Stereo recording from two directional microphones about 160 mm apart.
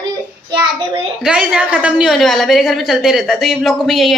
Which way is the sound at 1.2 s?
5° right (ahead or behind).